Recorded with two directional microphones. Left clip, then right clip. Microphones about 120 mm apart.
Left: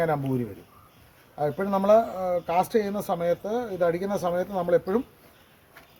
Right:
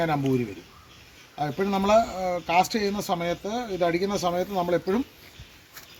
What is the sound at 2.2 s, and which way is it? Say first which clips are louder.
Speech: right 2 dB; 40° left (ahead or behind).